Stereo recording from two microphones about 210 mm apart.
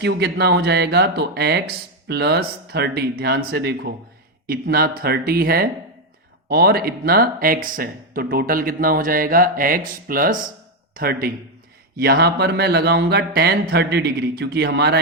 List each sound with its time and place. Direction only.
0.0 s speech: 50° right (ahead or behind)